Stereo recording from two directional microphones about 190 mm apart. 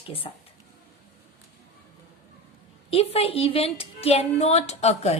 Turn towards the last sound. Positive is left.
turn(degrees=35)  # may be behind; listen again after turning